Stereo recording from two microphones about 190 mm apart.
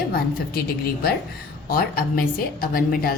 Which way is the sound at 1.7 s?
50° left (ahead or behind).